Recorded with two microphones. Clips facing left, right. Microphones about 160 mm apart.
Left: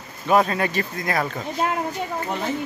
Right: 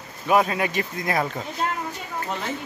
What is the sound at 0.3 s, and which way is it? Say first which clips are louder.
Speech: left 1 dB; 10° right (ahead or behind).